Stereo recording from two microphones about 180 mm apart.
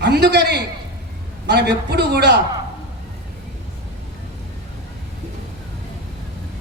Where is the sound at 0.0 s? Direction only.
70° right (ahead or behind).